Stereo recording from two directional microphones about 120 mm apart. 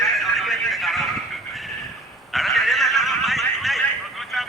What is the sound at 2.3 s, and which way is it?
Horse, centre (ahead or behind).